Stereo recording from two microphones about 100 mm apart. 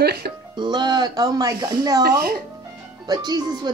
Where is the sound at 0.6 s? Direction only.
45° right (ahead or behind).